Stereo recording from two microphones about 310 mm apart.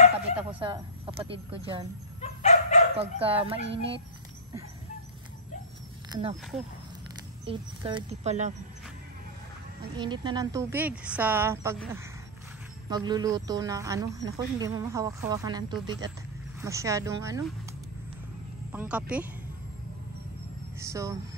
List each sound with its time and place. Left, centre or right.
0.5 s speech: centre
2.2 s dog: left
3.0 s speech: centre
3.6 s speech: right
6.0 s a sound: centre
7.4 s speech: centre
9.9 s speech: centre
12.9 s speech: centre
18.7 s speech: centre
20.8 s speech: centre